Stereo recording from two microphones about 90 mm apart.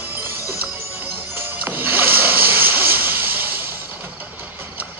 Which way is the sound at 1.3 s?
20° right (ahead or behind).